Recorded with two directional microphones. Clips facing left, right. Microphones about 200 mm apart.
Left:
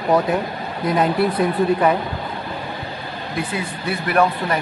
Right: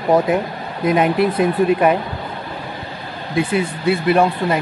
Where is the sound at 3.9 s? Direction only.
25° right (ahead or behind).